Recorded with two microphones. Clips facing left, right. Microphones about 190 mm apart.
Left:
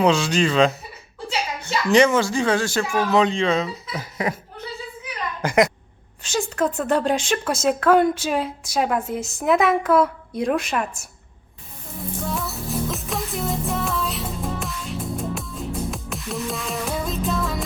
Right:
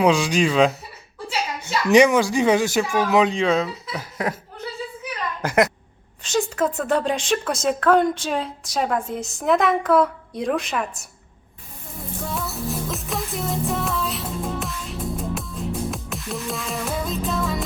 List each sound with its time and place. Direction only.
0.0 s speech: 10° right (ahead or behind)
3.1 s a woman's voice: 5° right (ahead or behind)
5.4 s a woman's voice: 5° right (ahead or behind)
12.2 s music: centre (ahead or behind)